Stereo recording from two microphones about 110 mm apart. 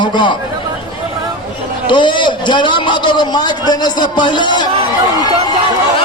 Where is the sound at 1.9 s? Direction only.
45° left (ahead or behind).